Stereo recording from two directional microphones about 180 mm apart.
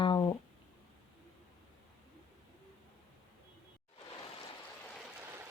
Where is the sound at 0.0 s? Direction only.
25° left (ahead or behind).